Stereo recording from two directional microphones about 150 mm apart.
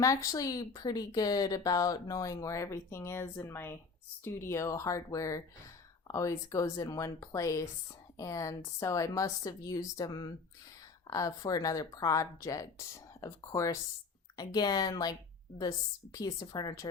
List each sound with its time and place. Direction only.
0.0 s speech: 20° left (ahead or behind)
16.1 s speech: 25° left (ahead or behind)